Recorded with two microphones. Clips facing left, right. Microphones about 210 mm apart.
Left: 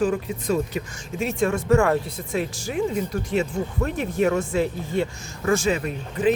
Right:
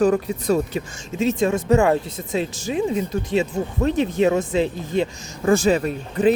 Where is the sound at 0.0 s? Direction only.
40° right (ahead or behind).